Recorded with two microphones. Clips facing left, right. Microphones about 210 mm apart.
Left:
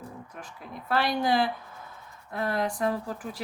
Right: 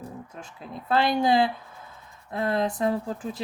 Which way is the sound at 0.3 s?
25° right (ahead or behind).